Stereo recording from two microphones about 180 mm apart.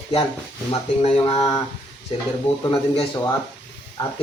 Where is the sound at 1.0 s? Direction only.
35° left (ahead or behind).